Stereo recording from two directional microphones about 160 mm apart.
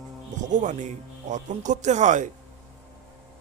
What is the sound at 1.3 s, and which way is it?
Speech, 50° right (ahead or behind).